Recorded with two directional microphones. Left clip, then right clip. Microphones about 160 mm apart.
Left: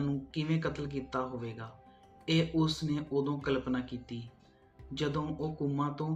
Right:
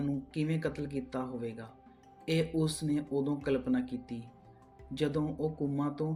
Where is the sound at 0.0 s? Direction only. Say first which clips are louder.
Right 1 dB; 50° right (ahead or behind).